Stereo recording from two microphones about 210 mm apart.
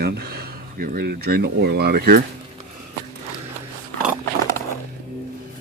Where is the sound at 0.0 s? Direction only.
50° right (ahead or behind).